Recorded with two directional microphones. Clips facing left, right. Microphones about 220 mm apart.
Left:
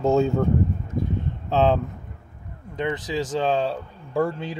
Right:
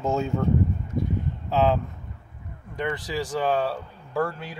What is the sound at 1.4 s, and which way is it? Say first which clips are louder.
Speech: left 2 dB; 25° left (ahead or behind).